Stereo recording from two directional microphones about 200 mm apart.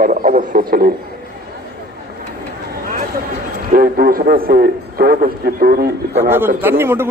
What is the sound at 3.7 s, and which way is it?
Speech, 45° right (ahead or behind).